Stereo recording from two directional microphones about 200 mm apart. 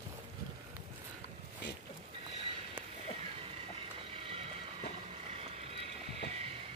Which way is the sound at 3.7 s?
30° right (ahead or behind).